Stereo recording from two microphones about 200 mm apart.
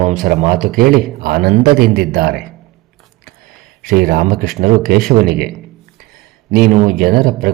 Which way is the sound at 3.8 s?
50° right (ahead or behind).